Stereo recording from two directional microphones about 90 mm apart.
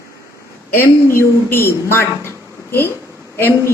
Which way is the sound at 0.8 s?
25° left (ahead or behind).